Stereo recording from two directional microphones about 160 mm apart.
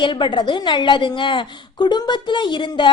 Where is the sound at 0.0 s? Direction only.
30° left (ahead or behind).